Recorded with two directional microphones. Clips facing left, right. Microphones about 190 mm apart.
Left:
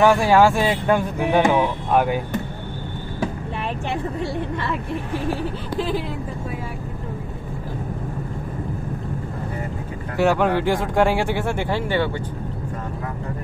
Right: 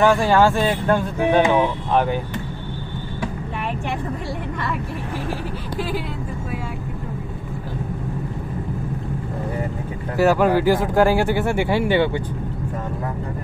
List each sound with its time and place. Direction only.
0.0 s speech: 10° left (ahead or behind)
10.1 s speech: 5° right (ahead or behind)